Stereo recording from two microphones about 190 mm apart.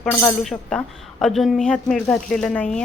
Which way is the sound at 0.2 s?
5° left (ahead or behind).